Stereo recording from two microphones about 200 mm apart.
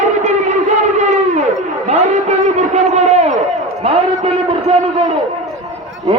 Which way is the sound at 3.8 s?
30° right (ahead or behind).